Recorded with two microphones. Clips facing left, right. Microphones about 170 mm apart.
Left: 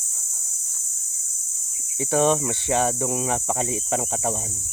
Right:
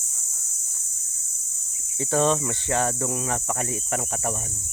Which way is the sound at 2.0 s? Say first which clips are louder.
Left 2 dB; 15° left (ahead or behind).